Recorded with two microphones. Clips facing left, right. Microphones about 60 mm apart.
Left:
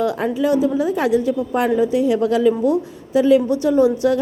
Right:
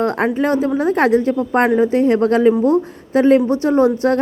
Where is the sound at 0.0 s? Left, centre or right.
Right.